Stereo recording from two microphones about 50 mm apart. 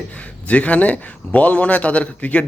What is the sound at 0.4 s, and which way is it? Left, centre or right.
A man's voice, left.